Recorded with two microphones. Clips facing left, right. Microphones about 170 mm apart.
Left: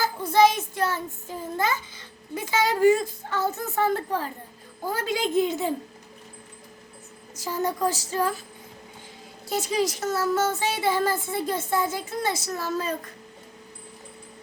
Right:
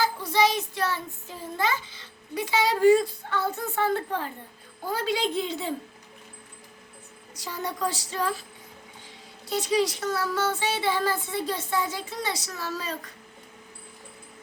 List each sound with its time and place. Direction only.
0.0 s a child's voice: 50° left (ahead or behind)
7.3 s speech: 45° left (ahead or behind)
9.5 s speech: 45° left (ahead or behind)